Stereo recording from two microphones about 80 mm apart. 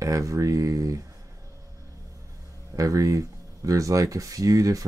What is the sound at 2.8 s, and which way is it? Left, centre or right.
Speech, right.